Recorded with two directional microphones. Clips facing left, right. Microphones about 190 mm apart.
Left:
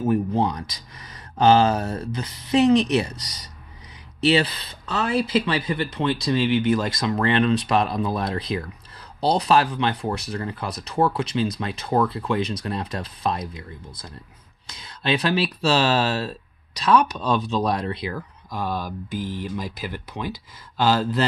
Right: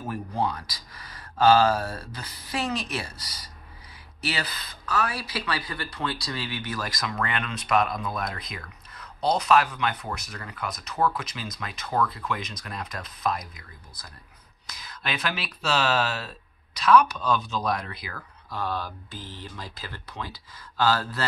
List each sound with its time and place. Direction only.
0.0 s speech: 25° left (ahead or behind)
18.5 s speech: 15° left (ahead or behind)